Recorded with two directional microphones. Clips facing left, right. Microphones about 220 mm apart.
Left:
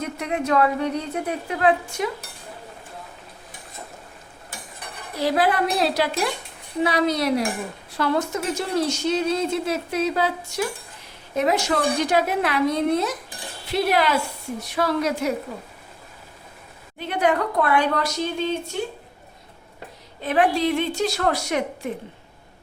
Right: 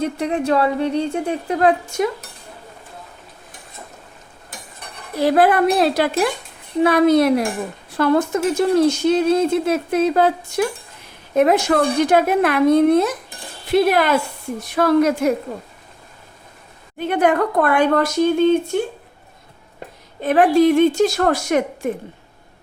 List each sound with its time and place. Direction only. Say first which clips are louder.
0.0 s speech: right 6 dB; 30° right (ahead or behind)
1.5 s speech: right 4 dB; 40° right (ahead or behind)
5.2 s speech: right 6 dB; 55° right (ahead or behind)
17.0 s speech: right 5 dB; 50° right (ahead or behind)
20.2 s speech: right 7 dB; 50° right (ahead or behind)